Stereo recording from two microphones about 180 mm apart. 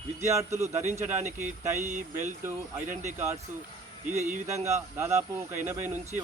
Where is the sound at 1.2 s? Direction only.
40° right (ahead or behind).